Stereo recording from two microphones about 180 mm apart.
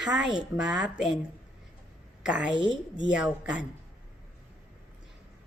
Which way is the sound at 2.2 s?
5° right (ahead or behind).